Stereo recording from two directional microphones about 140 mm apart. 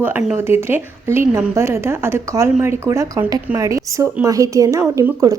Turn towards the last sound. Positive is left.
turn(degrees=-25)  # may be behind; listen again after turning